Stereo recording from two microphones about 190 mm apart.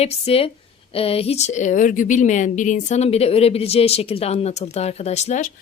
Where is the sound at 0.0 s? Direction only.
30° left (ahead or behind).